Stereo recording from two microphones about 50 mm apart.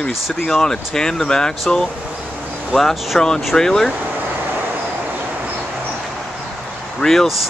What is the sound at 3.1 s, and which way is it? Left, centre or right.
Speech, centre.